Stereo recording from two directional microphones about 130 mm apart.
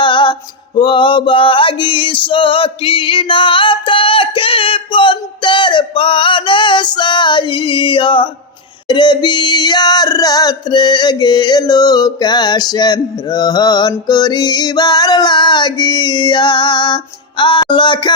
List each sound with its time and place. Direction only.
0.0 s music: 40° left (ahead or behind)
0.8 s male singing: 40° left (ahead or behind)
8.9 s a sound: 35° left (ahead or behind)